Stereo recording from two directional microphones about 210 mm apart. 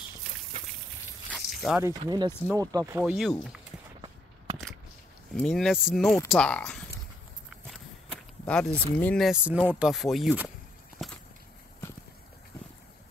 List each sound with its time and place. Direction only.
1.3 s a sound: centre (ahead or behind)
1.8 s speech: 15° right (ahead or behind)
3.0 s speech: centre (ahead or behind)
5.3 s speech: 5° left (ahead or behind)
7.4 s walk: centre (ahead or behind)
9.0 s speech: centre (ahead or behind)